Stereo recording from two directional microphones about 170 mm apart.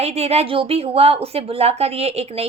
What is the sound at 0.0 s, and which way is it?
A woman's voice, 40° right (ahead or behind).